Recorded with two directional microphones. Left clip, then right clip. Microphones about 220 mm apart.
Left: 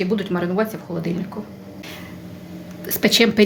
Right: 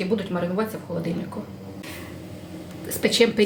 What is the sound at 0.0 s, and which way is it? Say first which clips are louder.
Speech: left 3 dB; 35° left (ahead or behind).